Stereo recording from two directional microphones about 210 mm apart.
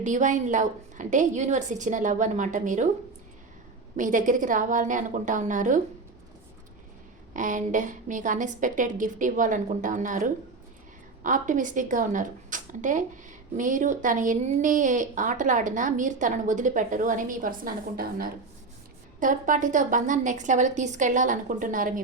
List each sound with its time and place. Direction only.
0.0 s a woman's voice: 35° right (ahead or behind)
3.9 s a woman's voice: 40° right (ahead or behind)
7.3 s a woman's voice: 35° right (ahead or behind)